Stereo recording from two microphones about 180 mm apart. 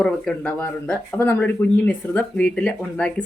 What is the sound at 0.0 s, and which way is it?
Speech, 5° left (ahead or behind).